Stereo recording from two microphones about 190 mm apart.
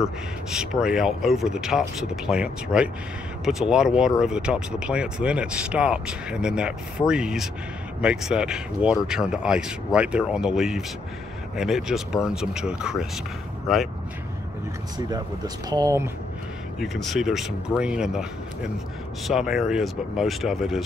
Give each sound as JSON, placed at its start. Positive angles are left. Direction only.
{"t": 0.0, "sound": "speech", "side_deg": -5}
{"t": 15.0, "sound": "speech", "side_deg": -20}
{"t": 16.8, "sound": "speech", "side_deg": 0}
{"t": 19.2, "sound": "speech", "side_deg": 0}